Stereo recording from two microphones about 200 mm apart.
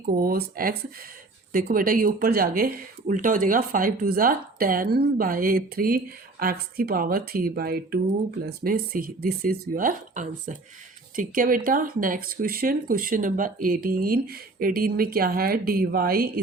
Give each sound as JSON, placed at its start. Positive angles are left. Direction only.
{"t": 0.1, "sound": "speech", "side_deg": -45}